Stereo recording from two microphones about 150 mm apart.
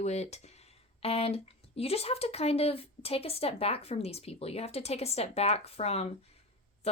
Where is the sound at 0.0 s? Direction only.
45° left (ahead or behind).